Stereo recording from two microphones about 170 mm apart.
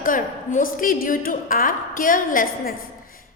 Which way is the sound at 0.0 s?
55° left (ahead or behind).